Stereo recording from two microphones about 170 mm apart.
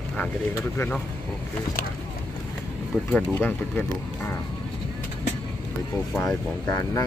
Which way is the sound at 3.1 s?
10° left (ahead or behind).